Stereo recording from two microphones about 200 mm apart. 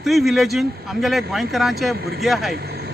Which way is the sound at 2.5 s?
50° right (ahead or behind).